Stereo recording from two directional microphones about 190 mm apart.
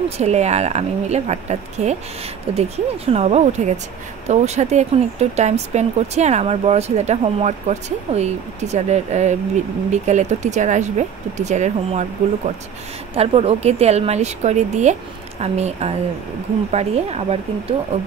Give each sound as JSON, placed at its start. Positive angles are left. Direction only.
{"t": 0.2, "sound": "speech", "side_deg": -35}